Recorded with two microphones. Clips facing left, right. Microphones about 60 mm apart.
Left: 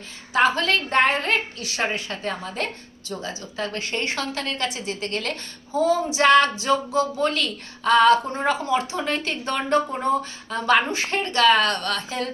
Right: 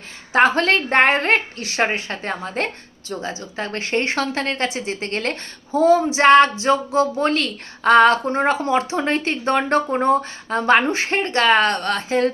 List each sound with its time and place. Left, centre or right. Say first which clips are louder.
0.3 s speech: right 4 dB; right
3.1 s speech: right 4 dB; right